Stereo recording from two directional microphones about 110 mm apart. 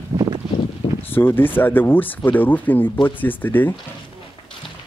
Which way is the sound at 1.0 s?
20° left (ahead or behind).